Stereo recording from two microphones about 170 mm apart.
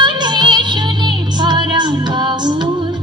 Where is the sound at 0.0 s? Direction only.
25° right (ahead or behind).